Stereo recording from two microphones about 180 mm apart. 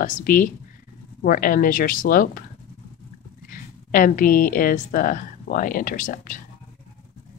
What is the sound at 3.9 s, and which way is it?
Speech, 50° left (ahead or behind).